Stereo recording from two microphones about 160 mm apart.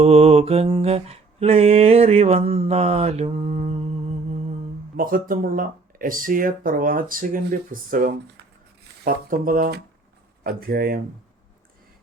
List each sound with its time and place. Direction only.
0.0 s mantra: 40° right (ahead or behind)
4.9 s speech: 60° right (ahead or behind)